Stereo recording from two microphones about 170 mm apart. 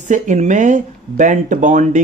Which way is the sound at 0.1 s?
45° right (ahead or behind).